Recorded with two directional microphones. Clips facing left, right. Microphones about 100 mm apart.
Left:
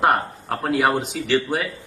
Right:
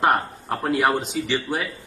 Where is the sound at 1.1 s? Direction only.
75° left (ahead or behind).